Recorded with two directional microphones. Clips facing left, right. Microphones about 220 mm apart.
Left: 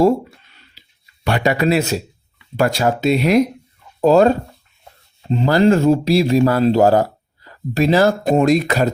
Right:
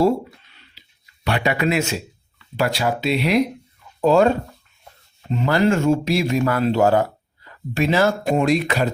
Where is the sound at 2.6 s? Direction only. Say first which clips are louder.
Left 4 dB; 45° left (ahead or behind).